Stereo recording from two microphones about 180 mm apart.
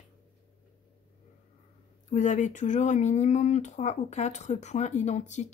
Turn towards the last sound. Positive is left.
turn(degrees=40)  # may be behind; listen again after turning